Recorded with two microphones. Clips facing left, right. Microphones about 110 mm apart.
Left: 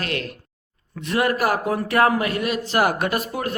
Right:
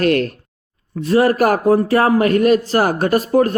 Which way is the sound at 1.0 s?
35° right (ahead or behind).